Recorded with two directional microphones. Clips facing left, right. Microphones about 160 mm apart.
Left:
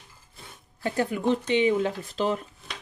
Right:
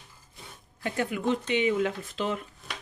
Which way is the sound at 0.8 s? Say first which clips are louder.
Left 3 dB; 35° left (ahead or behind).